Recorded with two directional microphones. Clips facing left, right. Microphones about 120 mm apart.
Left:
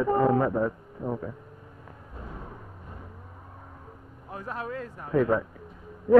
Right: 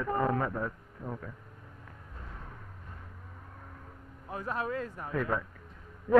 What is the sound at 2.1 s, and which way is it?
Music, 15° left (ahead or behind).